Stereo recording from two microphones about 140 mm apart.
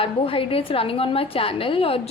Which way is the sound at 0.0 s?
40° left (ahead or behind).